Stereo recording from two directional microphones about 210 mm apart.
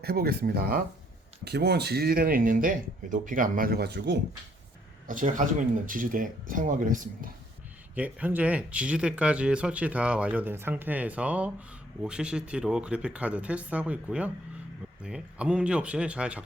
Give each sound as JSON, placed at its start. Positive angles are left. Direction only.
{"t": 0.0, "sound": "speech", "side_deg": -50}
{"t": 5.0, "sound": "speech", "side_deg": -40}
{"t": 7.9, "sound": "speech", "side_deg": -5}